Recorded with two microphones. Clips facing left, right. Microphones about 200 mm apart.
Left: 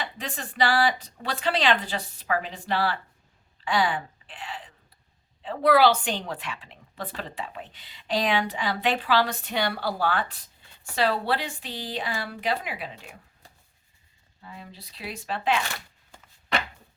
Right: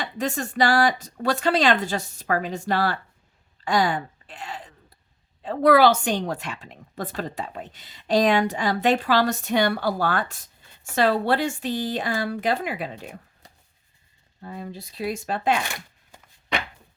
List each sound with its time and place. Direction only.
0.0 s a woman's voice: 45° right (ahead or behind)
3.6 s a sound: 45° right (ahead or behind)
5.4 s a woman's voice: 45° right (ahead or behind)
14.4 s a woman's voice: 45° right (ahead or behind)